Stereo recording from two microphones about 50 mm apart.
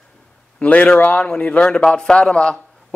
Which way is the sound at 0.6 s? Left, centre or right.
Left.